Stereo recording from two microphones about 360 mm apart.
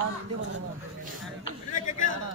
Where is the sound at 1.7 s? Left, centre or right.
Left.